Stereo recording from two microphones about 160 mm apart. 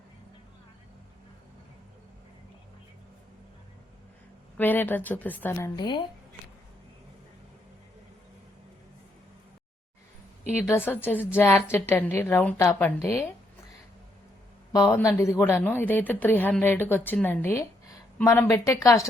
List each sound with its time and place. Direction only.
4.5 s a woman's voice: 10° left (ahead or behind); by 6.0 s 25° left (ahead or behind)
10.8 s a woman's voice: 10° left (ahead or behind)
14.7 s a woman's voice: 20° left (ahead or behind)